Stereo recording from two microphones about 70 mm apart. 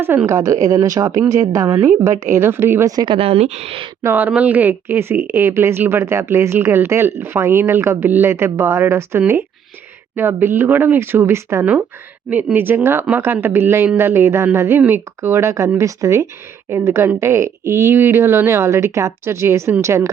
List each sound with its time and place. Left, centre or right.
0.3 s a woman's voice: right
2.8 s speech: right
4.0 s speech: right
4.4 s speech: right
11.6 s a woman's voice: right